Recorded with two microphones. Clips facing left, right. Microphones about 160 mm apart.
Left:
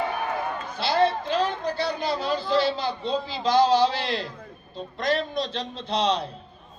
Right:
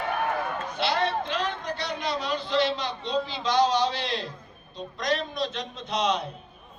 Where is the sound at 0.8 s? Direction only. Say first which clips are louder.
Left 4 dB; 30° left (ahead or behind).